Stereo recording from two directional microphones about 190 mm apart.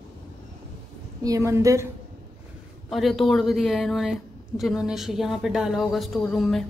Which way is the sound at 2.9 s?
Centre (ahead or behind).